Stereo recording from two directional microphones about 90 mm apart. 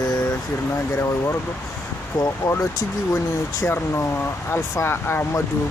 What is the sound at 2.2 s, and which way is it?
Speech, 30° left (ahead or behind).